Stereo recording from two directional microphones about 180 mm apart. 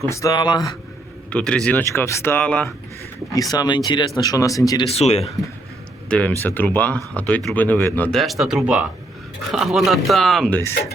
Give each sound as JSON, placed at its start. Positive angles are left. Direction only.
{"t": 0.1, "sound": "speech", "side_deg": 20}
{"t": 1.3, "sound": "speech", "side_deg": 5}
{"t": 3.3, "sound": "speech", "side_deg": 20}
{"t": 4.9, "sound": "speech", "side_deg": 35}
{"t": 6.1, "sound": "speech", "side_deg": 5}